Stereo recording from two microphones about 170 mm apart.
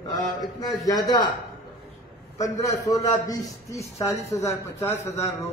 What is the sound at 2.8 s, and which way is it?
A man's voice, 20° left (ahead or behind).